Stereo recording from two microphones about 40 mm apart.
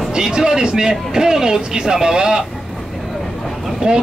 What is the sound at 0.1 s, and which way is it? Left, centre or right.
A man's voice, centre.